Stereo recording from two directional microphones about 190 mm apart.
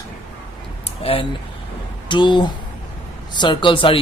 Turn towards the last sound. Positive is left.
turn(degrees=25)  # may be behind; listen again after turning